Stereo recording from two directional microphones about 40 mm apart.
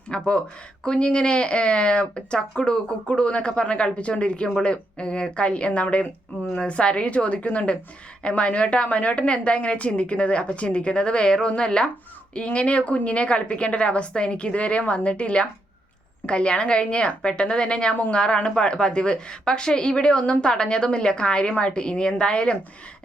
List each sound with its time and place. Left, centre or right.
0.1 s a woman's voice: left